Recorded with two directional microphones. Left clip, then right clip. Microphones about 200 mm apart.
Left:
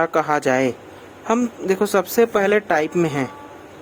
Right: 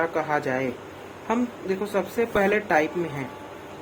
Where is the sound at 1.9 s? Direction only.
55° left (ahead or behind).